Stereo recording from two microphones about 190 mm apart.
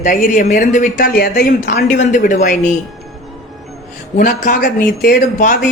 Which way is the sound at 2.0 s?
40° left (ahead or behind).